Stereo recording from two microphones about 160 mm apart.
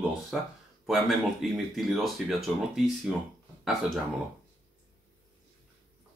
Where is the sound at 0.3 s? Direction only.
Centre (ahead or behind).